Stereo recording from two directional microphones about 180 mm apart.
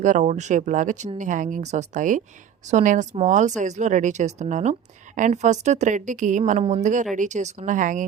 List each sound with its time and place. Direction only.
0.0 s a woman's voice: 45° right (ahead or behind)